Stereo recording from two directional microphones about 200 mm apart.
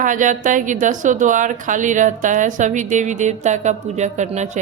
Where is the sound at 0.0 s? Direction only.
40° right (ahead or behind).